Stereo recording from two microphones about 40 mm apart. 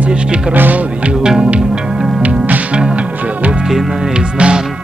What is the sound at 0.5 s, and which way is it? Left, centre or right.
Speech, right.